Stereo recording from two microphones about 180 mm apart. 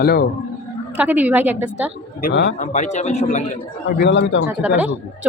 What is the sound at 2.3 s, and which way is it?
Speech, 75° left (ahead or behind).